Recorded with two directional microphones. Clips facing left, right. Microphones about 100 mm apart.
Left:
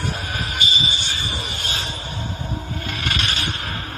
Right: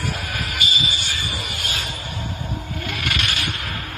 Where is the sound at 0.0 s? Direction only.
30° left (ahead or behind).